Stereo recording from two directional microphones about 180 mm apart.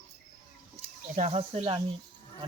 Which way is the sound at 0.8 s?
40° right (ahead or behind).